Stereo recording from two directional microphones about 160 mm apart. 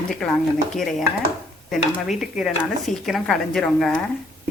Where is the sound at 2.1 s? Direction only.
Centre (ahead or behind).